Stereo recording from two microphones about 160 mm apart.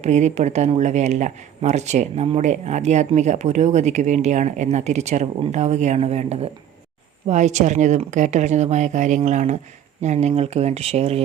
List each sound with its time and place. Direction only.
0.0 s speech: 45° right (ahead or behind)